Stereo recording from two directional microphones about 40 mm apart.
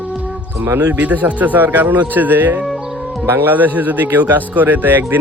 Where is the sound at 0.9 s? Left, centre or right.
Right.